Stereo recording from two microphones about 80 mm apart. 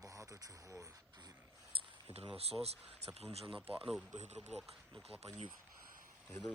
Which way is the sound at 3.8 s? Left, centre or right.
Centre.